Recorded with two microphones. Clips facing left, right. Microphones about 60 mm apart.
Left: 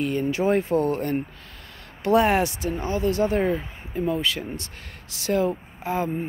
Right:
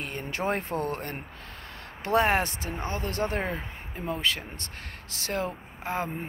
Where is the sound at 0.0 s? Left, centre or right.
Right.